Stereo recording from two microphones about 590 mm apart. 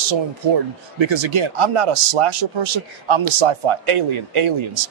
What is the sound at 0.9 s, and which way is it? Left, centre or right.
Speech, right.